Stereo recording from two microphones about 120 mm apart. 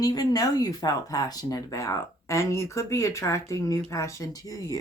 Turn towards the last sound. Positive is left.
turn(degrees=30)  # may be behind; listen again after turning